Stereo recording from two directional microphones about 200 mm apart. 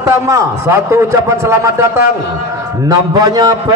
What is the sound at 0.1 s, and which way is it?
A man's voice, 15° right (ahead or behind).